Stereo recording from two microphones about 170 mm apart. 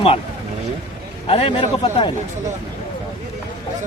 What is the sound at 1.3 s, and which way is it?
Speech, 35° left (ahead or behind).